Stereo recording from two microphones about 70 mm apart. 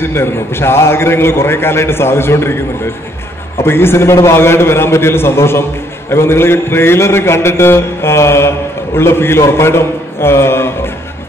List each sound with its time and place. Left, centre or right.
0.0 s a man's voice: left
3.6 s a man's voice: left